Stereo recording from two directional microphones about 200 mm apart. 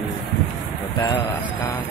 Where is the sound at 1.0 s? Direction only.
20° left (ahead or behind).